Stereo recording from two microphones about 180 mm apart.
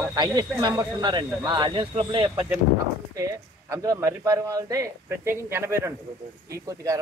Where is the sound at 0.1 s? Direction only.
20° right (ahead or behind).